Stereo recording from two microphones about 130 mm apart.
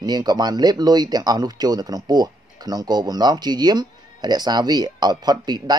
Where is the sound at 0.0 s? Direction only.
30° right (ahead or behind).